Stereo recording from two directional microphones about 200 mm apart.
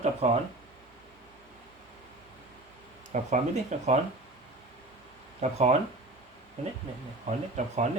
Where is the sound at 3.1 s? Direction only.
40° right (ahead or behind).